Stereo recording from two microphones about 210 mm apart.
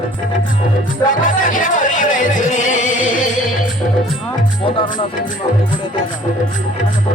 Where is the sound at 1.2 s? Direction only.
40° left (ahead or behind).